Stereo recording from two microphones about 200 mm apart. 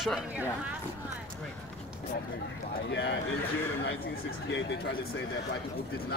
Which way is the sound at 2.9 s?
60° left (ahead or behind).